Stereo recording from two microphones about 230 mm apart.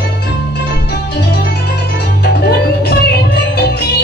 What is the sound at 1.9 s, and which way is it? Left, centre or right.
Music, left.